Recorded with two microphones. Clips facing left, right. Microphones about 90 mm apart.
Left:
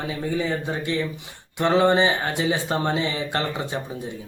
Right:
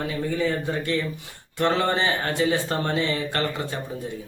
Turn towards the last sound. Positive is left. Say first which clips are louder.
# left 1 dB
turn(degrees=20)  # may be behind; listen again after turning